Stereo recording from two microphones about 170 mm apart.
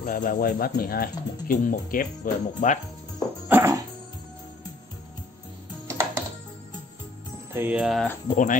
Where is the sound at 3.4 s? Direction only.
15° right (ahead or behind).